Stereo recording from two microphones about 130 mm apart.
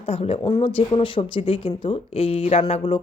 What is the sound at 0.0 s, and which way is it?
A woman's voice, 50° left (ahead or behind).